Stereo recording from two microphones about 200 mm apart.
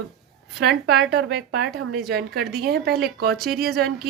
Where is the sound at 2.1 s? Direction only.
55° right (ahead or behind).